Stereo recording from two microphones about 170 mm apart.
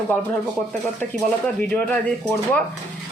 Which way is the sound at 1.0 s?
5° left (ahead or behind).